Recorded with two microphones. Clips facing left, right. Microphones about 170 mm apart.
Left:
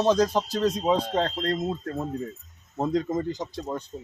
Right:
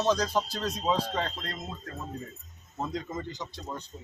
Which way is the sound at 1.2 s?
50° left (ahead or behind).